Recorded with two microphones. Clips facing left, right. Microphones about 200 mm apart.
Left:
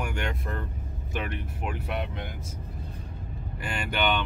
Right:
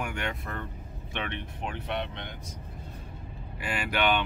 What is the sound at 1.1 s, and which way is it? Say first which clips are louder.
Speech: left 2 dB; 5° left (ahead or behind).